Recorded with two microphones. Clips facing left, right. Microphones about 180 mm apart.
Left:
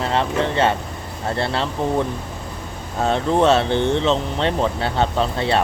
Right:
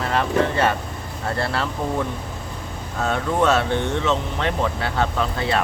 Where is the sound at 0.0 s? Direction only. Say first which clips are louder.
Even; 25° left (ahead or behind).